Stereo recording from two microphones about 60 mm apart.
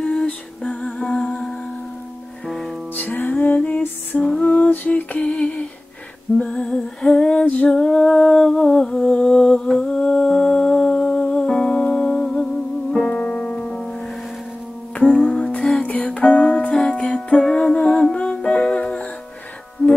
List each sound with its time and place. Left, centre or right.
0.0 s lullaby: centre
0.6 s humming: centre
2.4 s music: centre
3.0 s music: left
4.2 s female singing: centre
5.3 s a sound: centre
6.3 s humming: centre
11.2 s music: centre
15.1 s music: centre
16.7 s music: centre